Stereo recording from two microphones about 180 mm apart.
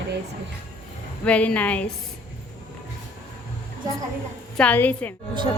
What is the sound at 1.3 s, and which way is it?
Speech, 5° left (ahead or behind).